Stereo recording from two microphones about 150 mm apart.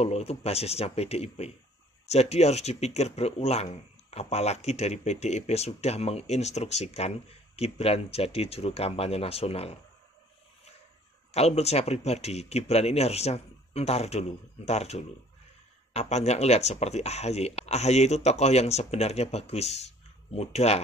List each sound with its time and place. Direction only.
0.0 s speech: 45° left (ahead or behind)
11.3 s speech: 45° left (ahead or behind)